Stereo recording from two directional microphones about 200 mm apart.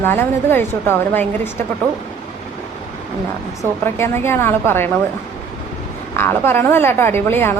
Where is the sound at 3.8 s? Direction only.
10° left (ahead or behind).